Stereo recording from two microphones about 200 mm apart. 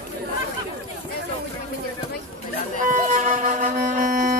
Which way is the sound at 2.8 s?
40° right (ahead or behind).